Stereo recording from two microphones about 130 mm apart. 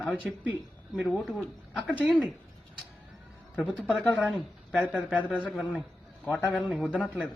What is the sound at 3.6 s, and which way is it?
Speech, 10° left (ahead or behind).